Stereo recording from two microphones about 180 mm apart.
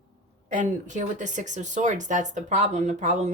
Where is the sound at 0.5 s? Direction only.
45° right (ahead or behind).